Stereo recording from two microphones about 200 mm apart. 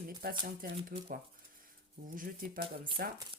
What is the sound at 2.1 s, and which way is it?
Speech, 45° right (ahead or behind).